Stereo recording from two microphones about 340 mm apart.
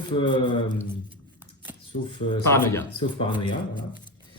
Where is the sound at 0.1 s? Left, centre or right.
Centre.